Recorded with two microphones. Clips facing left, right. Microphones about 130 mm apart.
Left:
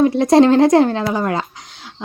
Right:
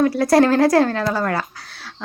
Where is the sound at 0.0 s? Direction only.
20° left (ahead or behind).